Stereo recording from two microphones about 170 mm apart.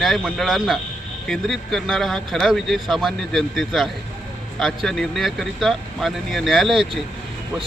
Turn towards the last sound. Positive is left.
turn(degrees=0)  # may be behind; listen again after turning